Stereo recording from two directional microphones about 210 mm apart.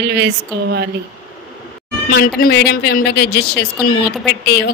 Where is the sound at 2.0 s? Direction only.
45° left (ahead or behind).